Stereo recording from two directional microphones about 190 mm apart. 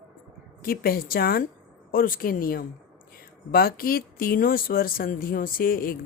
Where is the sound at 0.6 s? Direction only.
50° left (ahead or behind).